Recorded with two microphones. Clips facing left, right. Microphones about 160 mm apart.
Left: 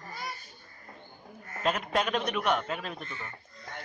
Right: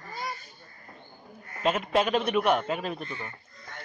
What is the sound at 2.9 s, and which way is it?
Speech, 30° right (ahead or behind).